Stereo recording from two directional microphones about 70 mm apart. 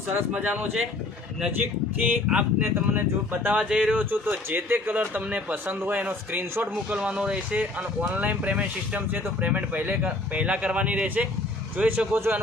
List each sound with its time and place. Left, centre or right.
0.4 s a man's voice: right
3.6 s speech: centre
4.1 s a man's voice: right; by 7.3 s centre
8.0 s a man's voice: right